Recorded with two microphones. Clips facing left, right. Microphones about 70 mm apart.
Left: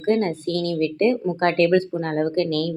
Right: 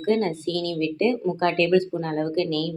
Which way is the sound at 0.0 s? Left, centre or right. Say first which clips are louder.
Left 2 dB; left.